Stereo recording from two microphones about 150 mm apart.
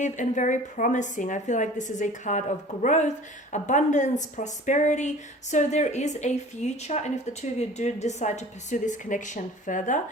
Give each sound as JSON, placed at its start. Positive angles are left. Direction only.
{"t": 0.0, "sound": "a woman's voice", "side_deg": 55}